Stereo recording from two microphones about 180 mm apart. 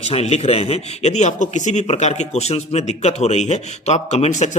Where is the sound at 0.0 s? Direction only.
35° left (ahead or behind).